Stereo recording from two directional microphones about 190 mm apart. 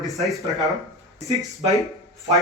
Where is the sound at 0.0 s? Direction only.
Centre (ahead or behind).